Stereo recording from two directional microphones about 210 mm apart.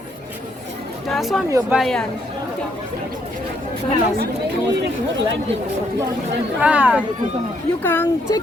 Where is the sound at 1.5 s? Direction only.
15° right (ahead or behind).